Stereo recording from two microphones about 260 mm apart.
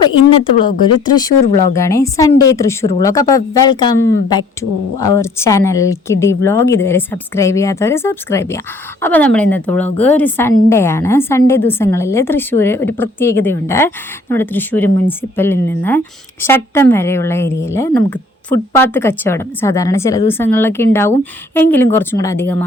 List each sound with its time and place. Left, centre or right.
0.6 s a woman's voice: centre